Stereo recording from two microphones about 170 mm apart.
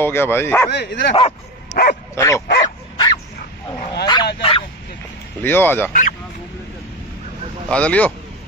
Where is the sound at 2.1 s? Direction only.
15° left (ahead or behind).